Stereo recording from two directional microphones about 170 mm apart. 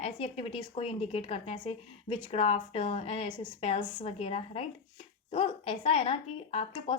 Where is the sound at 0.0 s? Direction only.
35° left (ahead or behind).